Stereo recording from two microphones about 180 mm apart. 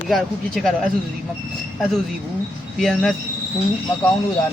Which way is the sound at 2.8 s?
Centre (ahead or behind).